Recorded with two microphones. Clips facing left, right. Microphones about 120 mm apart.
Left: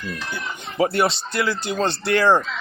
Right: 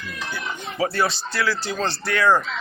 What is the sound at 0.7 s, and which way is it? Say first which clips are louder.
A man's voice: left 4 dB; 25° left (ahead or behind).